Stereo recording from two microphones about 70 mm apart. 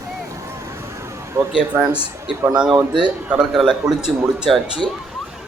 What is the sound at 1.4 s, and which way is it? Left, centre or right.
Speech, right.